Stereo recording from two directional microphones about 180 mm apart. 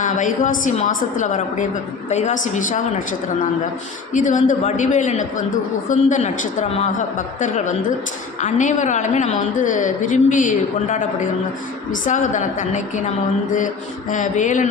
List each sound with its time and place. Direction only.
0.0 s a woman's voice: 45° left (ahead or behind)
14.1 s a woman's voice: 45° left (ahead or behind)